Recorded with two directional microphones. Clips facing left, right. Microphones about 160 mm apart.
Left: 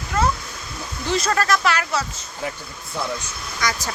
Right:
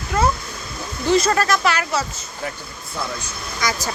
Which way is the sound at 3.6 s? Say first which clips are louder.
Right 2 dB; 5° right (ahead or behind).